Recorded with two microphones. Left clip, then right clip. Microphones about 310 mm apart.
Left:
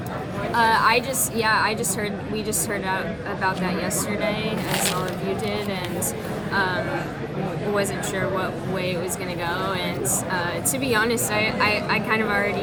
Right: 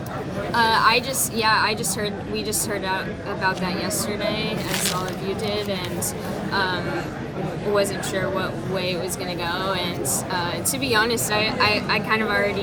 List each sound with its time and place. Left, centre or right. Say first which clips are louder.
0.5 s a woman's voice: even; centre
4.7 s speech: left 2 dB; left
6.5 s speech: even; centre
7.8 s a woman's voice: right 3 dB; centre
10.8 s a woman's voice: right 2 dB; centre